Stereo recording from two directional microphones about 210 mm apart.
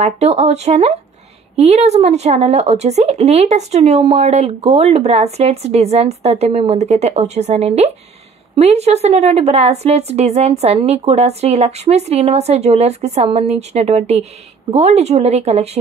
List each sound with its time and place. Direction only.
0.0 s speech: 30° right (ahead or behind)